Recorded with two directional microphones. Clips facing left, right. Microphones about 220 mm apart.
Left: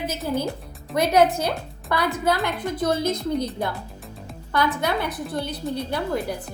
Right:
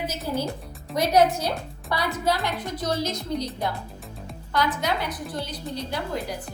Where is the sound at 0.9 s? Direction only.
55° left (ahead or behind).